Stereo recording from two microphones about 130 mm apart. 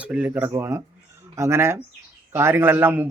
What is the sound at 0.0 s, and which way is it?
A man's voice, 10° right (ahead or behind).